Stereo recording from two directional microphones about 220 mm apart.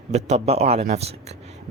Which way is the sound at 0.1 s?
30° right (ahead or behind).